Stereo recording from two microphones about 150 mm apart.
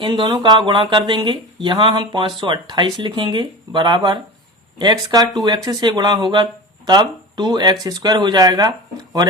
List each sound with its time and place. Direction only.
0.0 s speech: 30° right (ahead or behind)